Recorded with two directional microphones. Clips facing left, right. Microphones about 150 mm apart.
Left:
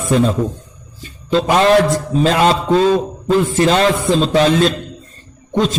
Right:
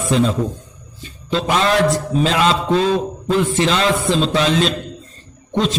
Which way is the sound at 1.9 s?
50° left (ahead or behind).